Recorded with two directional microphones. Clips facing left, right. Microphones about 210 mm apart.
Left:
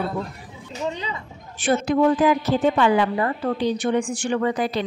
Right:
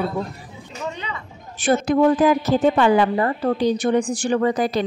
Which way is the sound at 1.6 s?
40° right (ahead or behind).